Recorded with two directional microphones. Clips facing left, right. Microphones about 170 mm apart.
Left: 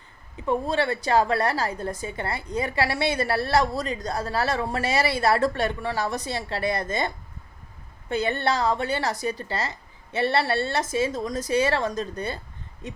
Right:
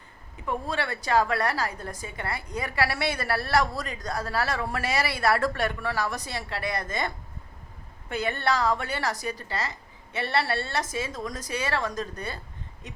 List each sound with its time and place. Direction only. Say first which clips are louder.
0.4 s a woman's voice: left 6 dB; 25° left (ahead or behind)
8.1 s a woman's voice: left 3 dB; 25° left (ahead or behind)